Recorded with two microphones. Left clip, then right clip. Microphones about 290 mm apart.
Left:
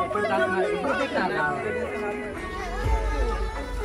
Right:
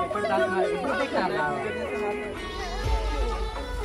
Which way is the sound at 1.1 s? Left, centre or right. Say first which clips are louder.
Left 1 dB; right.